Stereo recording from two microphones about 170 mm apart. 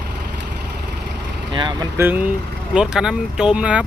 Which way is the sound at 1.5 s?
25° right (ahead or behind).